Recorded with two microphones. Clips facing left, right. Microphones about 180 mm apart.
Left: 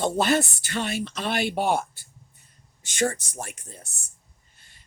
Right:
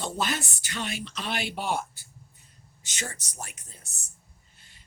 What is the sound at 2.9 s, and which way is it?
Speech, 55° left (ahead or behind).